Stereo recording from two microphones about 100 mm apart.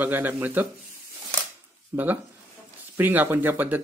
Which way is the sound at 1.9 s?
20° right (ahead or behind).